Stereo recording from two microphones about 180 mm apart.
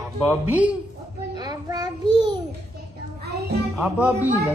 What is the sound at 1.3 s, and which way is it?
Child singing, 20° right (ahead or behind).